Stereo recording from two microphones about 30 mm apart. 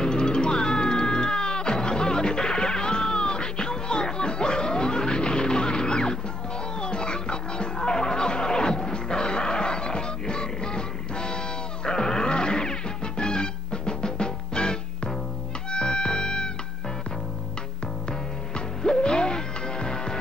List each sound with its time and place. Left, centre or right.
0.0 s music: left
7.8 s music: centre
11.8 s music: centre
12.3 s music: left
18.8 s music: left